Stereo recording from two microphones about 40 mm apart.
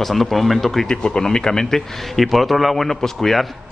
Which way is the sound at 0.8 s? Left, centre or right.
Centre.